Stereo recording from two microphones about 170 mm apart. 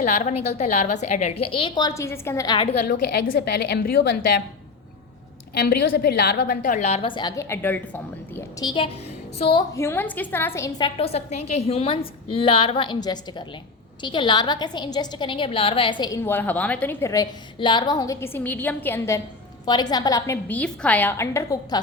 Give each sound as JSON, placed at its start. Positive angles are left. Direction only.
{"t": 0.0, "sound": "a woman's voice", "side_deg": 45}
{"t": 2.8, "sound": "a woman's voice", "side_deg": 50}
{"t": 3.3, "sound": "a woman's voice", "side_deg": 75}
{"t": 5.5, "sound": "a woman's voice", "side_deg": 65}
{"t": 8.5, "sound": "a woman's voice", "side_deg": 25}
{"t": 9.7, "sound": "a woman's voice", "side_deg": 15}